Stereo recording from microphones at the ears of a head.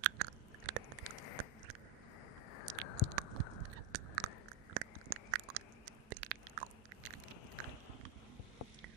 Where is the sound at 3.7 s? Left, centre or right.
Right.